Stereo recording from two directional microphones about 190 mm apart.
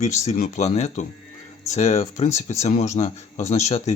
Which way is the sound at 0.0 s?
35° left (ahead or behind).